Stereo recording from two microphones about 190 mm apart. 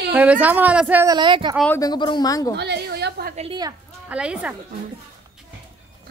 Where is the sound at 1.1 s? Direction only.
25° right (ahead or behind).